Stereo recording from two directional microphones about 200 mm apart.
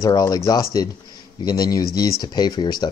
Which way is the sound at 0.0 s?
20° left (ahead or behind).